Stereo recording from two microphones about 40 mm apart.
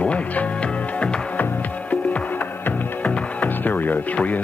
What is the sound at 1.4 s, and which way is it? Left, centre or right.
Music, left.